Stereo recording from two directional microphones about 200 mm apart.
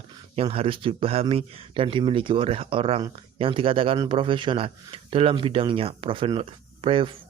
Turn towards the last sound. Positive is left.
turn(degrees=-25)  # may be behind; listen again after turning